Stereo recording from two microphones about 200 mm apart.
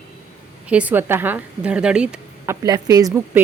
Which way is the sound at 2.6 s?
20° right (ahead or behind).